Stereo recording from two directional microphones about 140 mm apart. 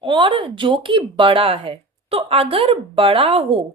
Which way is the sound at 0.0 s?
35° right (ahead or behind).